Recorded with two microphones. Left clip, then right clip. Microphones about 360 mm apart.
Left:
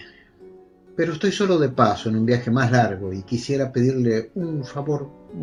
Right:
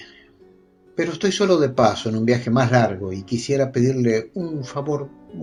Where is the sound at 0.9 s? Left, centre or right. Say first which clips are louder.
Right 1 dB; centre.